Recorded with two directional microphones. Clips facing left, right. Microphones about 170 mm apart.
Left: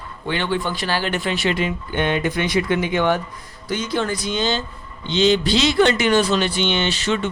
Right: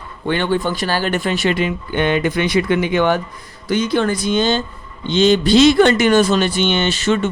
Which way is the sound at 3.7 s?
65° right (ahead or behind).